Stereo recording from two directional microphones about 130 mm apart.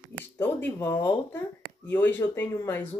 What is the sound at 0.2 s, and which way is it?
Speech, 15° left (ahead or behind).